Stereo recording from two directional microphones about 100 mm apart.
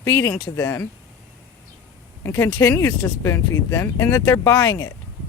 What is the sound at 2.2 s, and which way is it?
Speech, 25° left (ahead or behind).